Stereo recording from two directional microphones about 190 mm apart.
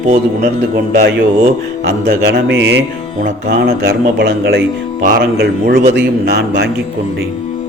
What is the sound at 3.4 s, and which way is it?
Speech, 50° right (ahead or behind).